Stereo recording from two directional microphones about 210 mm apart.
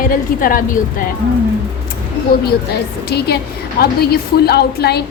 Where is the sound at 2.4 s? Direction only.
50° left (ahead or behind).